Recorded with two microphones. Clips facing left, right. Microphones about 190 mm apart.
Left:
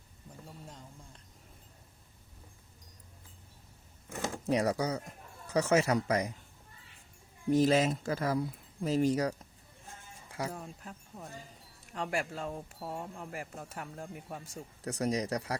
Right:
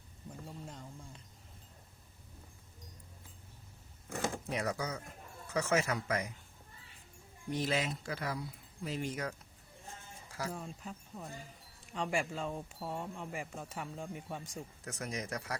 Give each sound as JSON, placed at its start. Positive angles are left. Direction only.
{"t": 4.4, "sound": "speech", "side_deg": 35}
{"t": 7.5, "sound": "speech", "side_deg": 45}
{"t": 10.5, "sound": "speech", "side_deg": 0}
{"t": 14.8, "sound": "speech", "side_deg": 35}